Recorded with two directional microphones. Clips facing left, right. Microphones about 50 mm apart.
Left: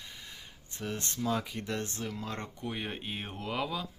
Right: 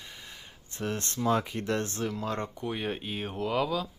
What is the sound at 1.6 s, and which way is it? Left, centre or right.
Speech, right.